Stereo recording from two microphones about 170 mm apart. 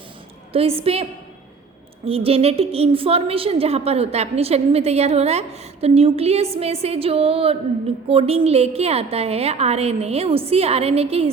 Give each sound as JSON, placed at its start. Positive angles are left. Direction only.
{"t": 0.5, "sound": "a woman's voice", "side_deg": -35}
{"t": 2.0, "sound": "a woman's voice", "side_deg": -35}